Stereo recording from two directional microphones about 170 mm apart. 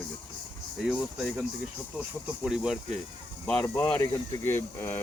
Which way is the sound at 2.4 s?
5° right (ahead or behind).